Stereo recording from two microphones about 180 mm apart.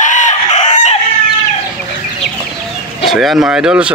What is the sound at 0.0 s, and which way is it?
Chicken, 45° left (ahead or behind).